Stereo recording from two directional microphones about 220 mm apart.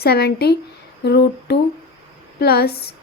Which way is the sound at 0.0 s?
45° left (ahead or behind).